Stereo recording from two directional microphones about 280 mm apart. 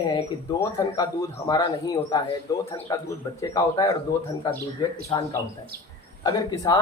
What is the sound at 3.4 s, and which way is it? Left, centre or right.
Speech, centre.